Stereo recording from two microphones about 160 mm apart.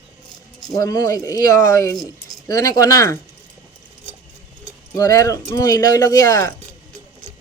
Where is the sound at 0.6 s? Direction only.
20° left (ahead or behind).